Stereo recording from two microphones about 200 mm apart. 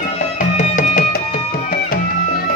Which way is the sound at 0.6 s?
40° left (ahead or behind).